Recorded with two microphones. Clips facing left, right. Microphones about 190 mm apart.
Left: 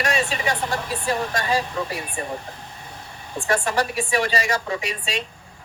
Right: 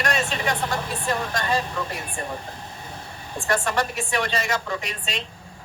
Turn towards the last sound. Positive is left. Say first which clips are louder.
# left 3 dB
turn(degrees=10)  # may be behind; listen again after turning